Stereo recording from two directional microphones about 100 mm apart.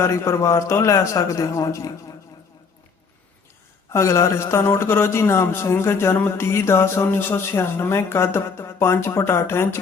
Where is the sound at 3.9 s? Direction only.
30° left (ahead or behind).